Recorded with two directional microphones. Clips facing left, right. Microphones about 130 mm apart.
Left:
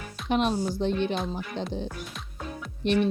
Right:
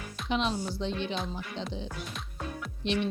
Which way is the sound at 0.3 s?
50° left (ahead or behind).